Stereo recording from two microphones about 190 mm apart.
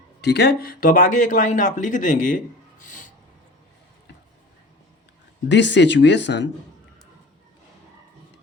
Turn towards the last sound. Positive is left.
turn(degrees=70)  # may be behind; listen again after turning